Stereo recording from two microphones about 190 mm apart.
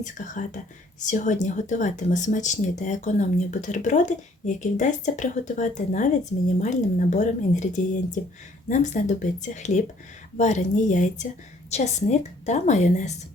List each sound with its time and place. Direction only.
0.0 s speech: 40° left (ahead or behind)